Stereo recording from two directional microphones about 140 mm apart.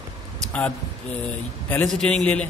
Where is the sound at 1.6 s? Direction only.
10° left (ahead or behind).